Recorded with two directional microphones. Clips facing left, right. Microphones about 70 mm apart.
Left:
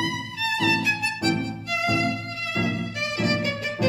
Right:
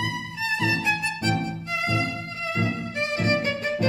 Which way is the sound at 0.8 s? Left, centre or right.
Right.